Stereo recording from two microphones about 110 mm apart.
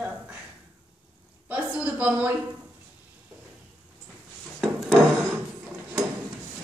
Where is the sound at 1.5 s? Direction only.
10° right (ahead or behind).